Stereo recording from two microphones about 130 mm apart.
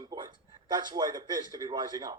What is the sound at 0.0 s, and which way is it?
A man's voice, 30° right (ahead or behind).